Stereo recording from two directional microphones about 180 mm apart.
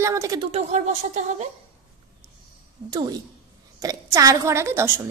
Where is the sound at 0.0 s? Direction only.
15° right (ahead or behind).